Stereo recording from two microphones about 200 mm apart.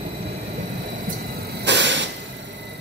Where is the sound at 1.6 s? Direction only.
60° right (ahead or behind).